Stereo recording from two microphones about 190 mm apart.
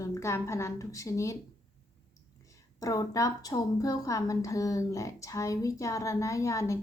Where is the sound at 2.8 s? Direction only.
20° left (ahead or behind).